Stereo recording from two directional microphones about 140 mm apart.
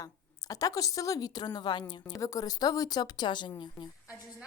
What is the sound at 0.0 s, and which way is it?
A woman's voice, 25° left (ahead or behind).